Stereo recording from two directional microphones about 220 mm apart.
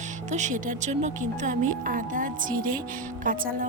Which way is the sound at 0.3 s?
35° right (ahead or behind).